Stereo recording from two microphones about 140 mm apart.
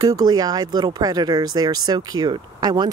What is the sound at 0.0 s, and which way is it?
Speech, 30° right (ahead or behind).